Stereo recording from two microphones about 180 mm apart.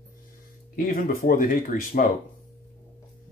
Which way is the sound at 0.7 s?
50° left (ahead or behind).